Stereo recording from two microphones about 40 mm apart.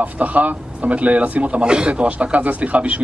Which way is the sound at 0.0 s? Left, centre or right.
Right.